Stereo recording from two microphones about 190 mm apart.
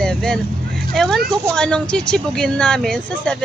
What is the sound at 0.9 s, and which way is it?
Speech, centre (ahead or behind).